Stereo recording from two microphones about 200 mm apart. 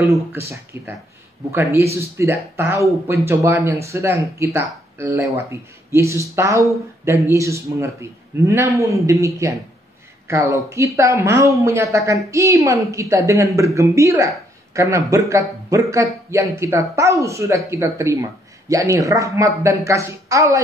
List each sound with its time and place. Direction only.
0.3 s speech: 10° right (ahead or behind)